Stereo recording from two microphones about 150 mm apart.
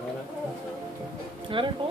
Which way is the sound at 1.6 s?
35° right (ahead or behind).